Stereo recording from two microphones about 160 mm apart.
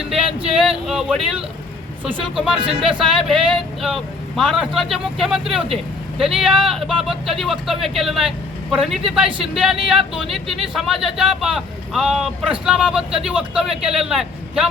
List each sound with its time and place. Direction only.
0.3 s male singing: 35° right (ahead or behind)
0.5 s speech: 5° right (ahead or behind)